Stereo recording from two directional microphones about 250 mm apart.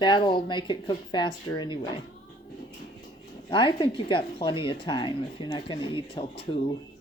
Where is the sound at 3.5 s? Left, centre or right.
Centre.